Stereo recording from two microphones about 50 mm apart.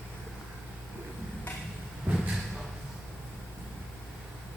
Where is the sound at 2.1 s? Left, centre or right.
Right.